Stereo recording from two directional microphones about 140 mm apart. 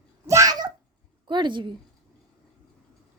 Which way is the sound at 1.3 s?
35° right (ahead or behind).